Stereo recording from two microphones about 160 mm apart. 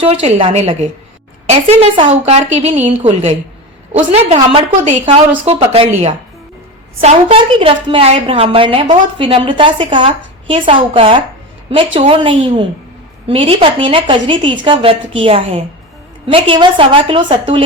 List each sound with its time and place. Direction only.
0.0 s a woman's voice: 40° right (ahead or behind)
4.7 s a woman's voice: 50° right (ahead or behind)
5.5 s a woman's voice: 35° right (ahead or behind)
7.0 s a woman's voice: 40° right (ahead or behind)